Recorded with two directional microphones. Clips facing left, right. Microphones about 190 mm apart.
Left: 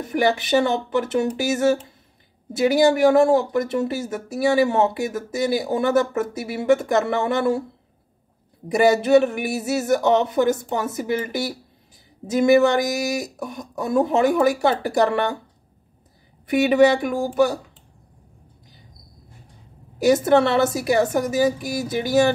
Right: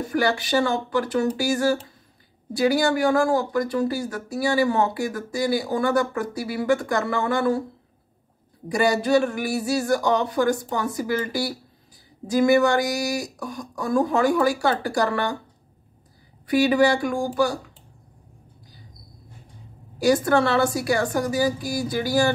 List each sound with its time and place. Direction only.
0.1 s speech: 20° left (ahead or behind)
8.6 s speech: 20° left (ahead or behind)
16.4 s speech: 20° left (ahead or behind)
20.0 s speech: 20° left (ahead or behind)